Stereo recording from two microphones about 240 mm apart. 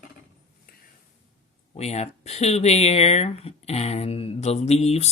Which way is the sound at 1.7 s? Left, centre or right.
Left.